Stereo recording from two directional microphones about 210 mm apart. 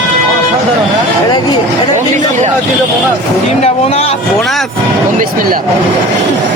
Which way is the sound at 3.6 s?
30° left (ahead or behind).